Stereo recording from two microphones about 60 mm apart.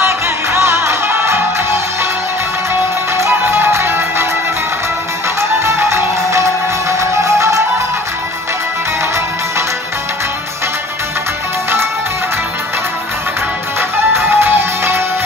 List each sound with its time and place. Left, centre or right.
0.0 s music: right
3.2 s music: right
5.4 s music: right
13.7 s music: right